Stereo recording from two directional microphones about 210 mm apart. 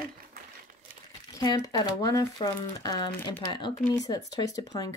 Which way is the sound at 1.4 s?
15° left (ahead or behind).